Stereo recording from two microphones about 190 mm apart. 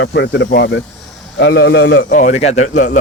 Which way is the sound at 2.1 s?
40° left (ahead or behind).